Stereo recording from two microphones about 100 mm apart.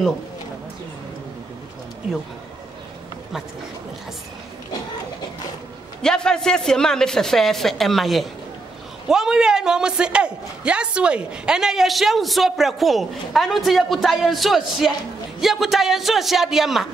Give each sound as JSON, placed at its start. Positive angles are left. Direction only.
{"t": 6.0, "sound": "a woman's voice", "side_deg": 5}